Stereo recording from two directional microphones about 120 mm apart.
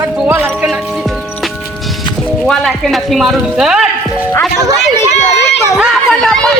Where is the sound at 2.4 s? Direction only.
Centre (ahead or behind).